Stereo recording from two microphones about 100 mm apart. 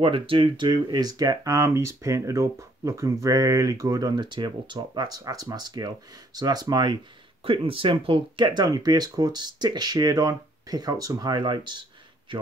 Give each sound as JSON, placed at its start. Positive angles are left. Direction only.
{"t": 0.0, "sound": "speech", "side_deg": -60}
{"t": 4.1, "sound": "speech", "side_deg": -50}
{"t": 7.4, "sound": "speech", "side_deg": -65}